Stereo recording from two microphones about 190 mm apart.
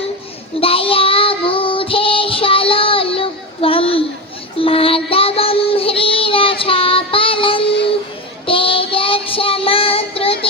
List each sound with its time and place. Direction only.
0.6 s child singing: 30° left (ahead or behind)